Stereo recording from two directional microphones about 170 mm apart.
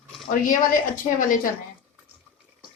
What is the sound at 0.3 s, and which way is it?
Speech, 55° left (ahead or behind).